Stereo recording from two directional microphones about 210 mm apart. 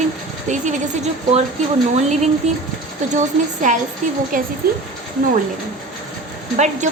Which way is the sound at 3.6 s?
35° right (ahead or behind).